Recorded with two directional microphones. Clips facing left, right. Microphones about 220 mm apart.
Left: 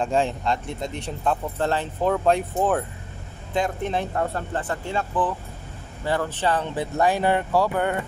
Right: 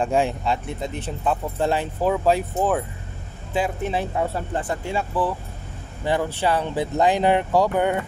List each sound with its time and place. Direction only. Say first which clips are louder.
0.0 s speech: right 1 dB; 10° right (ahead or behind)